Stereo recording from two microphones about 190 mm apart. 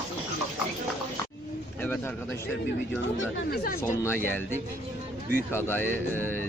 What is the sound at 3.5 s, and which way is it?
Speech, 55° left (ahead or behind).